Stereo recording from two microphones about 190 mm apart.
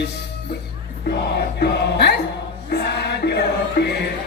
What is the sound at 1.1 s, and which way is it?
A man's voice, 60° left (ahead or behind).